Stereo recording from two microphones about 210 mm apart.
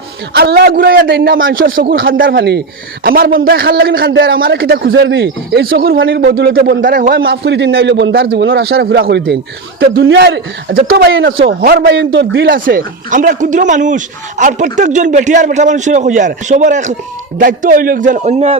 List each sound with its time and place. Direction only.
0.3 s a man's voice: 50° right (ahead or behind); by 18.5 s 30° right (ahead or behind)